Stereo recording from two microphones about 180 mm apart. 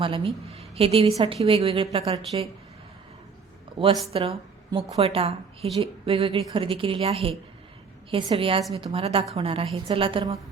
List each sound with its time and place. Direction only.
0.0 s a woman's voice: 30° right (ahead or behind)
4.1 s a woman's voice: 30° right (ahead or behind)